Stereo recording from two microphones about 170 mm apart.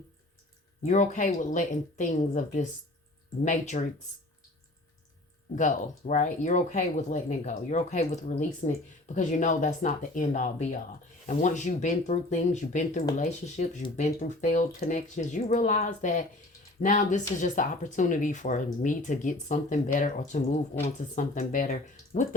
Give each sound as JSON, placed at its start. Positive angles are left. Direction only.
{"t": 0.9, "sound": "speech", "side_deg": 45}
{"t": 6.1, "sound": "speech", "side_deg": 45}